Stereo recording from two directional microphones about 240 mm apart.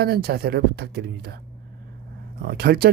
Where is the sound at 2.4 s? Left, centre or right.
Right.